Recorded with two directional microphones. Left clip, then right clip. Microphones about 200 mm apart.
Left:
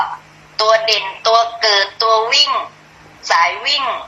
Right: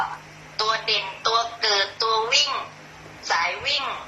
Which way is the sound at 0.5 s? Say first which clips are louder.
Left 10 dB; 30° left (ahead or behind).